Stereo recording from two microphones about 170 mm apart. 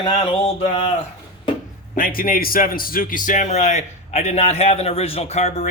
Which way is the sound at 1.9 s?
55° left (ahead or behind).